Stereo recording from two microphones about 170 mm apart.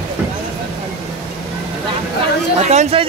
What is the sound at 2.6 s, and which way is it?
Speech, 40° right (ahead or behind).